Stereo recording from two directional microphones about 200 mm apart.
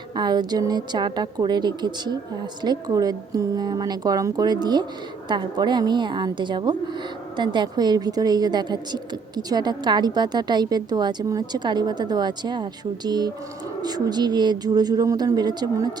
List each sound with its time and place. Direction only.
0.2 s a woman's voice: 20° right (ahead or behind)